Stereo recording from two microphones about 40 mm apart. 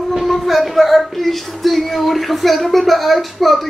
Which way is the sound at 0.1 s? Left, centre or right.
Centre.